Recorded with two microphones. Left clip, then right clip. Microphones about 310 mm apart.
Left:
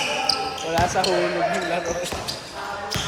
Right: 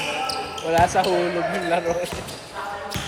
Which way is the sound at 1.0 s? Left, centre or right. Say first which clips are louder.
Right 1 dB; right.